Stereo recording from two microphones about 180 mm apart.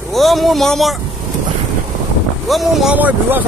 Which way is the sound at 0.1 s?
Centre (ahead or behind).